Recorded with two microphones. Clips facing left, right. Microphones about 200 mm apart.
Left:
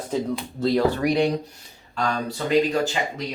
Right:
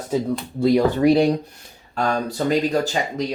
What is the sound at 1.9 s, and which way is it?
Speech, 45° right (ahead or behind).